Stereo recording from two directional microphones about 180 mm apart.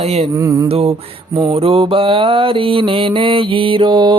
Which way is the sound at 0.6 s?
35° right (ahead or behind).